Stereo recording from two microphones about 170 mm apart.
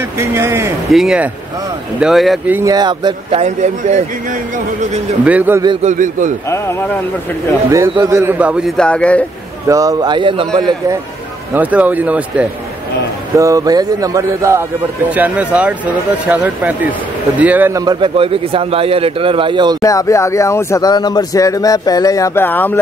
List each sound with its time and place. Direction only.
0.2 s speech: 15° right (ahead or behind)
0.8 s a man's voice: centre (ahead or behind)
2.5 s speech: 20° right (ahead or behind); by 4.0 s 45° right (ahead or behind)
5.2 s speech: 10° right (ahead or behind)
5.8 s a man's voice: 45° right (ahead or behind)
8.0 s a man's voice: 15° right (ahead or behind); by 9.2 s 5° left (ahead or behind)
9.7 s speech: 20° right (ahead or behind)
11.5 s speech: 10° right (ahead or behind)
13.4 s a man's voice: 20° right (ahead or behind)
19.8 s speech: 20° left (ahead or behind)